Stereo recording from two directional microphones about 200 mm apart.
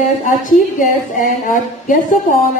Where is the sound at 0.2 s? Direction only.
40° left (ahead or behind).